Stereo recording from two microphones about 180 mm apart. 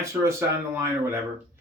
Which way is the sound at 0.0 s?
15° right (ahead or behind).